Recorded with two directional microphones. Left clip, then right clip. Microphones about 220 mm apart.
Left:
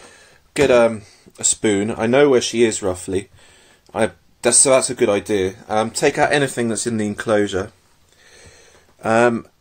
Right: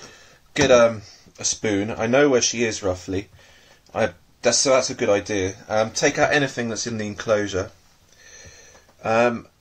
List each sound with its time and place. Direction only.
0.6 s speech: 35° left (ahead or behind)
1.6 s speech: 50° left (ahead or behind)
9.0 s speech: 50° left (ahead or behind)